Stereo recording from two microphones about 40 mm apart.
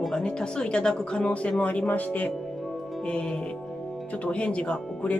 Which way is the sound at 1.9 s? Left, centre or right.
Left.